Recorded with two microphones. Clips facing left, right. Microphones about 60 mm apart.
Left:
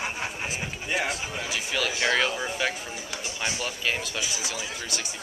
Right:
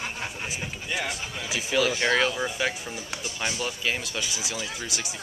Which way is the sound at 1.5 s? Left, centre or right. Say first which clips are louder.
Right 5 dB; centre.